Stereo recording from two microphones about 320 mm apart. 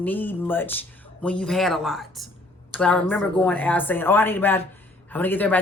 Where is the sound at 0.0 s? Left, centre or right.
Centre.